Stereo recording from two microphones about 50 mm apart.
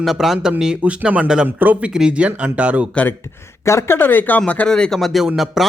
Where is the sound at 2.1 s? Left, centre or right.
Right.